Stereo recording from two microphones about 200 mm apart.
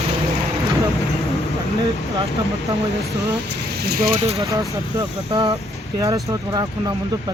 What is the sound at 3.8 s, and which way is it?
Speech, 50° right (ahead or behind).